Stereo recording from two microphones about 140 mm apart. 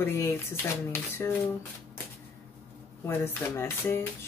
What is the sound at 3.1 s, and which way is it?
Speech, 15° left (ahead or behind).